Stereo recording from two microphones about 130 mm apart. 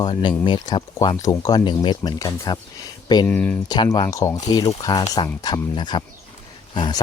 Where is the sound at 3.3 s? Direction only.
15° left (ahead or behind).